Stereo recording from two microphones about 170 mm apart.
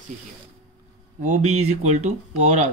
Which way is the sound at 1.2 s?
40° right (ahead or behind).